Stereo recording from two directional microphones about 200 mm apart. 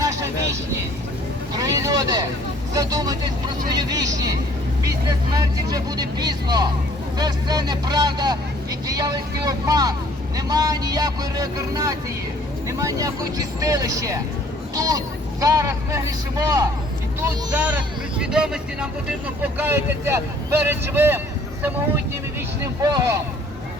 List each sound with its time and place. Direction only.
0.0 s vehicle: 15° right (ahead or behind)
1.5 s vehicle: 15° right (ahead or behind)
2.7 s speech: 20° right (ahead or behind)
22.8 s speech: 20° right (ahead or behind)